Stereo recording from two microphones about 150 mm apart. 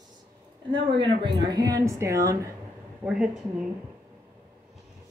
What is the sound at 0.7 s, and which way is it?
A woman's voice, 35° right (ahead or behind).